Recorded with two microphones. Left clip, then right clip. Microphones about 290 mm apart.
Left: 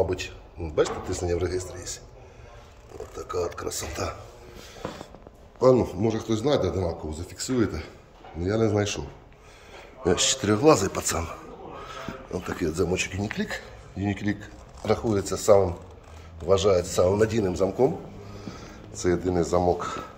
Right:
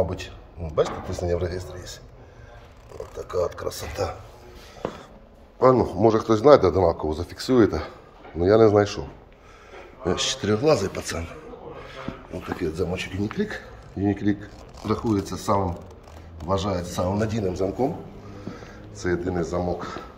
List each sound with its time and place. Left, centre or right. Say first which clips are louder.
0.7 s a man's voice: right 1 dB; centre
3.2 s a man's voice: right 3 dB; centre
5.6 s a man's voice: right 3 dB; centre
10.0 s speech: left 1 dB; centre
11.8 s a sound: left 1 dB; centre
12.5 s speech: left 1 dB; centre